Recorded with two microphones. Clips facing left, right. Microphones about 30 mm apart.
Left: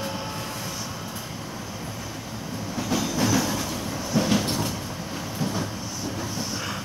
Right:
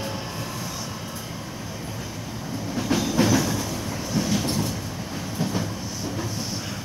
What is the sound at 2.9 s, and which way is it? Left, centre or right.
Train, right.